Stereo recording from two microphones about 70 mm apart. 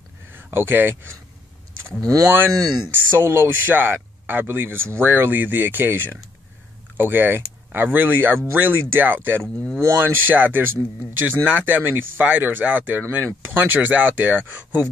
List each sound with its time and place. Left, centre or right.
0.3 s speech: right
2.0 s speech: right
2.2 s speech: right